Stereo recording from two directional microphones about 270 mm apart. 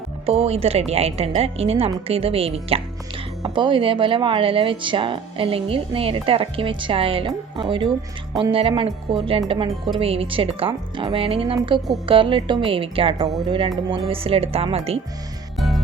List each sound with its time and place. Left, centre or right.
0.3 s speech: right
15.5 s music: centre